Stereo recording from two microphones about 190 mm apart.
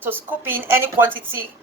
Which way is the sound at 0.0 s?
10° right (ahead or behind).